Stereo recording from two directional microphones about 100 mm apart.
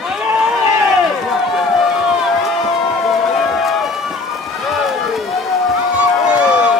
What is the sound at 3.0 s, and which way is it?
Run, centre (ahead or behind).